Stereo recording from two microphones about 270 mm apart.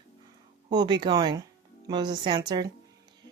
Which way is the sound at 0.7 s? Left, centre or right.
Centre.